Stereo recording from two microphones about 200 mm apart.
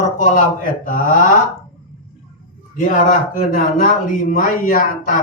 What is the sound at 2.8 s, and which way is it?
Speech, 45° left (ahead or behind).